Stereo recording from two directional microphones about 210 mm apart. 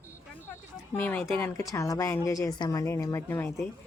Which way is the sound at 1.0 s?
10° left (ahead or behind).